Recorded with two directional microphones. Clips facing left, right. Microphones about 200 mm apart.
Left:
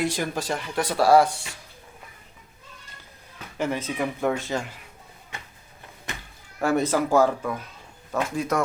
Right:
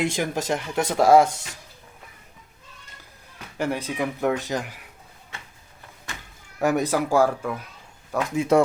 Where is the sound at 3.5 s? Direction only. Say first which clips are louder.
Right 1 dB; 10° right (ahead or behind).